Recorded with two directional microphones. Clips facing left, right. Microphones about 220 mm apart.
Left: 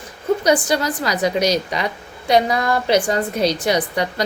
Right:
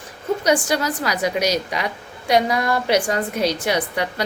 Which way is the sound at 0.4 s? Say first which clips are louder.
Even; 10° right (ahead or behind).